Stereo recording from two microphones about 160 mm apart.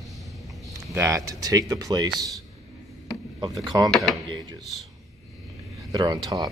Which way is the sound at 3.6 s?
25° right (ahead or behind).